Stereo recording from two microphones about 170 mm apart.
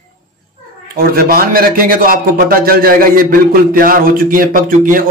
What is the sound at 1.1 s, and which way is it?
A man's voice, 60° right (ahead or behind).